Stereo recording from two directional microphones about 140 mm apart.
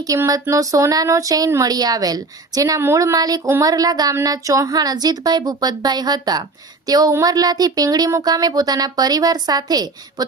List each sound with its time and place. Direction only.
0.0 s speech: 25° right (ahead or behind)